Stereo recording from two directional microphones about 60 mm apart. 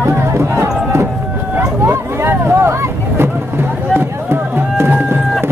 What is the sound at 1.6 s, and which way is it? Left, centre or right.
Vehicle, right.